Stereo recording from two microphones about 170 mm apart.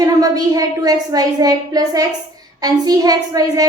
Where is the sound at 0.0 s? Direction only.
20° right (ahead or behind).